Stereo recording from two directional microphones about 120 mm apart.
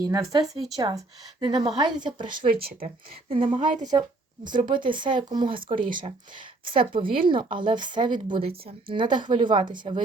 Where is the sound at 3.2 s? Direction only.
50° right (ahead or behind).